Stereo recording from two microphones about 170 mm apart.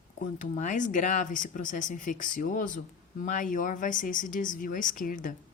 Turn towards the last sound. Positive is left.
turn(degrees=50)  # may be behind; listen again after turning